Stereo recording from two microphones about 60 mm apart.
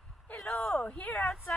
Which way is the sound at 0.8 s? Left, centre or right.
Centre.